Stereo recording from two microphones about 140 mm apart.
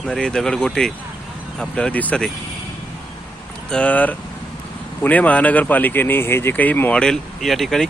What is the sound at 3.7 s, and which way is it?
Speech, 10° left (ahead or behind).